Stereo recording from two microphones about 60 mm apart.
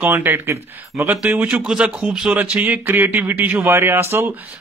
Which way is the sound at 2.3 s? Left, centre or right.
Right.